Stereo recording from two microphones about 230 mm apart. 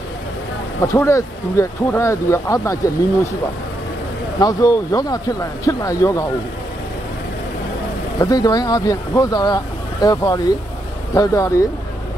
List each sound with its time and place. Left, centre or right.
0.8 s speech: centre
4.4 s speech: centre
8.2 s speech: centre